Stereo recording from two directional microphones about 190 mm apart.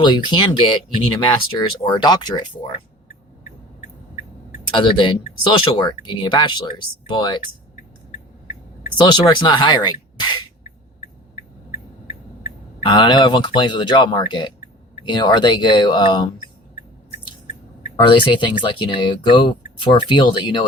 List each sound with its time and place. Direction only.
0.0 s speech: 25° left (ahead or behind)
4.7 s speech: 25° left (ahead or behind)
9.0 s speech: 25° left (ahead or behind)
12.8 s speech: 25° left (ahead or behind)
17.9 s speech: 25° left (ahead or behind)